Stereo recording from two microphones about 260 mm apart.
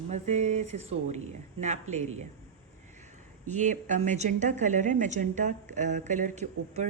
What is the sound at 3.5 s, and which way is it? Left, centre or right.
A woman's voice, right.